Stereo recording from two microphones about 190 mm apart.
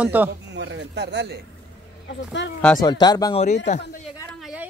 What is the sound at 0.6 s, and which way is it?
Speech, 65° right (ahead or behind).